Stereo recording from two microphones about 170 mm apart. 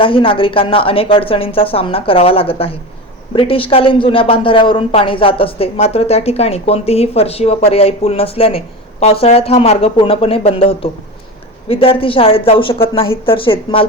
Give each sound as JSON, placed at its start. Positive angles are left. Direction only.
{"t": 0.0, "sound": "speech", "side_deg": 30}